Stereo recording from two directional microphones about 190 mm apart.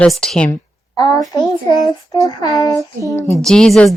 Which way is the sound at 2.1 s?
15° left (ahead or behind).